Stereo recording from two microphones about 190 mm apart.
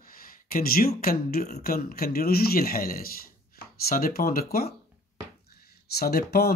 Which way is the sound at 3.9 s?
50° left (ahead or behind).